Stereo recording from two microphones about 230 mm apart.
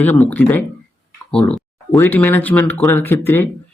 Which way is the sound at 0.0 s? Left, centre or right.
Centre.